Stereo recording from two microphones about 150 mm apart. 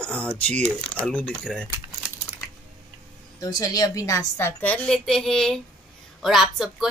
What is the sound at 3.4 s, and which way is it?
A woman's voice, 25° left (ahead or behind).